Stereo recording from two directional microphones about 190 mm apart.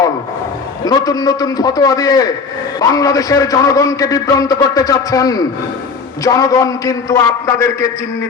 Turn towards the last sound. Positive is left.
turn(degrees=15)  # may be behind; listen again after turning